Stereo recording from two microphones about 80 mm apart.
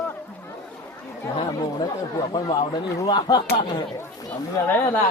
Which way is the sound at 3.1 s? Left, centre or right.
Left.